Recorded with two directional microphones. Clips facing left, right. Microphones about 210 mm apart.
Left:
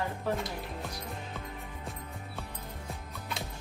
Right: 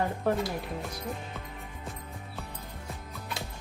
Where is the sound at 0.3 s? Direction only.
55° right (ahead or behind).